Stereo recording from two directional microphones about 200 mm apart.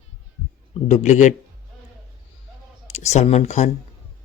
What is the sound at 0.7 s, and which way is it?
Speech, 35° left (ahead or behind).